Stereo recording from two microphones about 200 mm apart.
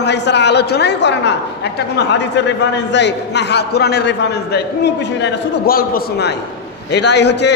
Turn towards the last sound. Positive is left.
turn(degrees=60)  # may be behind; listen again after turning